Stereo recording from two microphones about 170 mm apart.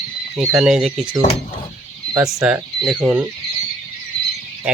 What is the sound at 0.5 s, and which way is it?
Speech, 5° right (ahead or behind).